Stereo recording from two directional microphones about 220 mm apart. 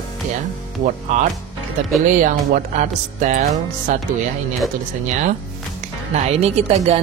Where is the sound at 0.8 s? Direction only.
35° right (ahead or behind).